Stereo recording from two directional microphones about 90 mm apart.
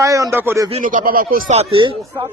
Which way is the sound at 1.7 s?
70° right (ahead or behind).